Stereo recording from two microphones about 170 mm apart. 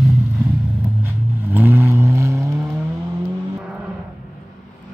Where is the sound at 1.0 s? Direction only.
10° right (ahead or behind).